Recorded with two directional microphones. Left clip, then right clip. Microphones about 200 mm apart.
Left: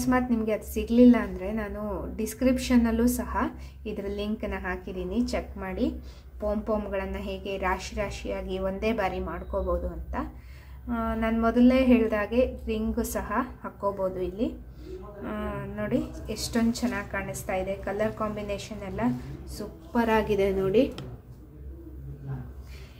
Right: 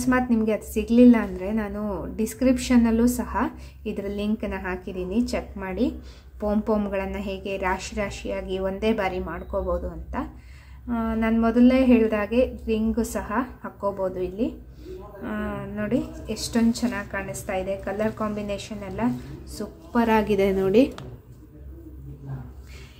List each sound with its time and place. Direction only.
0.0 s a woman's voice: 20° right (ahead or behind)